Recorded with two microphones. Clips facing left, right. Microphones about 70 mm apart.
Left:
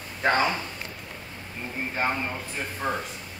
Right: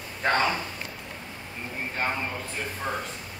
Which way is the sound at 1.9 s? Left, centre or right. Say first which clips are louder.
Left 2 dB; centre.